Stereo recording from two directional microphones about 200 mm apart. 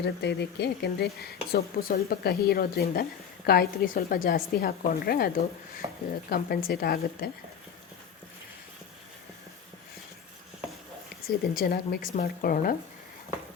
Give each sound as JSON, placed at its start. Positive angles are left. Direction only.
{"t": 0.0, "sound": "speech", "side_deg": 55}
{"t": 5.8, "sound": "a sound", "side_deg": -25}
{"t": 6.3, "sound": "speech", "side_deg": 50}
{"t": 11.3, "sound": "speech", "side_deg": 50}